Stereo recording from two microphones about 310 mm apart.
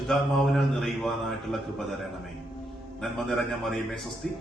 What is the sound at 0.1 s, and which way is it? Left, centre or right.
A man's voice, centre.